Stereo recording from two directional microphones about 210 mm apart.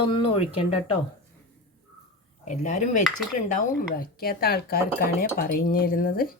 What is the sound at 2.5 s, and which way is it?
Speech, 35° left (ahead or behind).